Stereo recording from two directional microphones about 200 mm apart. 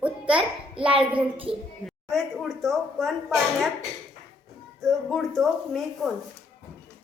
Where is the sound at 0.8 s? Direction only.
25° right (ahead or behind).